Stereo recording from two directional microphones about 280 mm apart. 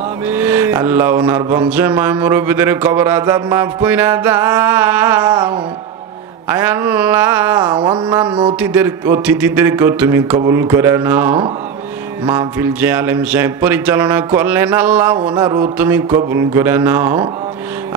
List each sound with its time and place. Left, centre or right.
0.3 s mantra: centre
6.5 s mantra: centre